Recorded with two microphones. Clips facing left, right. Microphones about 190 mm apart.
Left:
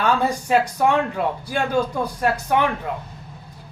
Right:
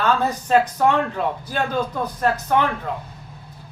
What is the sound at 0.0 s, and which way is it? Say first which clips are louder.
A man's voice: even; 10° left (ahead or behind).